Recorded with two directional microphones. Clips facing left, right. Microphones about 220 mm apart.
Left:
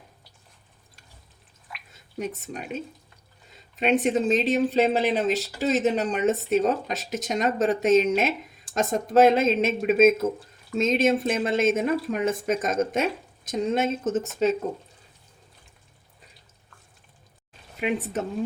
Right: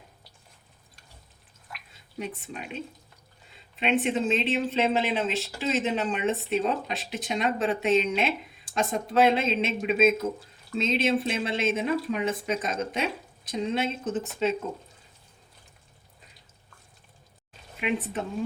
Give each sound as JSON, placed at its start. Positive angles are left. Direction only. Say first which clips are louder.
{"t": 2.1, "sound": "speech", "louder": "left 4 dB", "side_deg": 45}
{"t": 17.7, "sound": "speech", "louder": "left 2 dB", "side_deg": 40}